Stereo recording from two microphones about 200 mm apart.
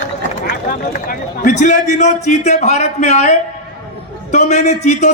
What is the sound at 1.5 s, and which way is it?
A man's voice, 35° left (ahead or behind).